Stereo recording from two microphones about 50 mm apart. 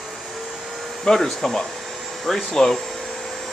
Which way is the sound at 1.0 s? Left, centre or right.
Centre.